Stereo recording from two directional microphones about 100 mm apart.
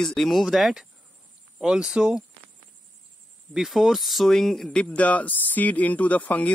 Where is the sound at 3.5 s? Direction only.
5° right (ahead or behind).